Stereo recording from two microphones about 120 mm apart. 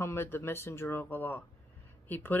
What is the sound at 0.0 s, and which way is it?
Speech, 20° left (ahead or behind).